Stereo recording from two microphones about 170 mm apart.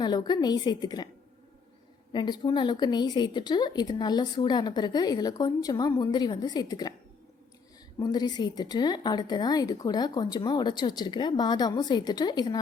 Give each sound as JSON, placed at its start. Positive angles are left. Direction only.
{"t": 0.0, "sound": "a woman's voice", "side_deg": 25}
{"t": 2.1, "sound": "a woman's voice", "side_deg": 25}
{"t": 7.9, "sound": "a woman's voice", "side_deg": 25}